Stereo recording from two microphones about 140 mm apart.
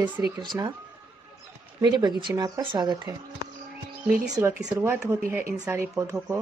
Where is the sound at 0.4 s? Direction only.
30° right (ahead or behind).